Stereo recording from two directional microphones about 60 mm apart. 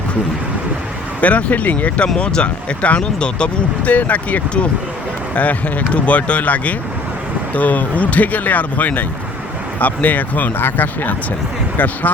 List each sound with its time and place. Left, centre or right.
1.2 s speech: left